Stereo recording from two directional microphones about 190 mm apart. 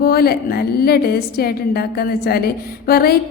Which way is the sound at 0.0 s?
55° left (ahead or behind).